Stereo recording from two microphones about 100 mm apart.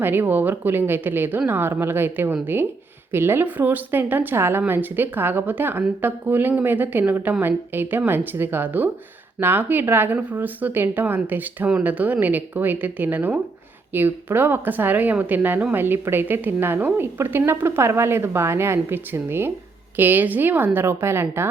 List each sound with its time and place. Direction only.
0.0 s a woman's voice: 20° right (ahead or behind)